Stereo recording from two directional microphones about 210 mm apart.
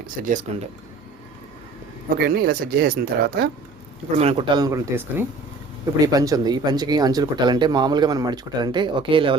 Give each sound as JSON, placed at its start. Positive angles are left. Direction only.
{"t": 0.2, "sound": "speech", "side_deg": -40}
{"t": 2.1, "sound": "speech", "side_deg": -45}
{"t": 4.2, "sound": "speech", "side_deg": -30}